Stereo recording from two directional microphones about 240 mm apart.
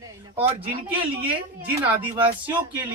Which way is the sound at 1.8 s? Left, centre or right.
Right.